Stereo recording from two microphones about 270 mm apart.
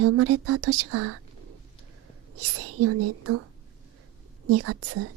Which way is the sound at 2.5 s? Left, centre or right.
Right.